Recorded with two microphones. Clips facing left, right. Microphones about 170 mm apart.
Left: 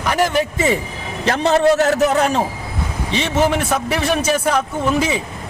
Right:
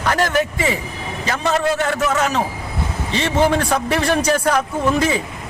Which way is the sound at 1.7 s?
40° left (ahead or behind).